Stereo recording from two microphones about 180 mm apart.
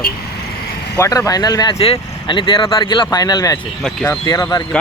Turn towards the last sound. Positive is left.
turn(degrees=20)  # may be behind; listen again after turning